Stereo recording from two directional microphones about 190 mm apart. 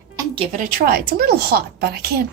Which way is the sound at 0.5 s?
50° right (ahead or behind).